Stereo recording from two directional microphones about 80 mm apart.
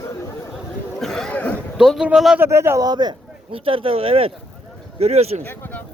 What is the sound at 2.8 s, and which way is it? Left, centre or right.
Speech, right.